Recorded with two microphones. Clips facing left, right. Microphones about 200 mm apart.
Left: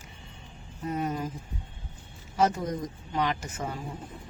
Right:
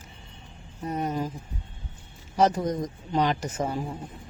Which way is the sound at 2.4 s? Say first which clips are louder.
Right 3 dB; 35° right (ahead or behind).